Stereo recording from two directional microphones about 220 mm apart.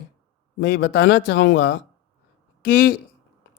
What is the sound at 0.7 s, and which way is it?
Speech, 45° left (ahead or behind).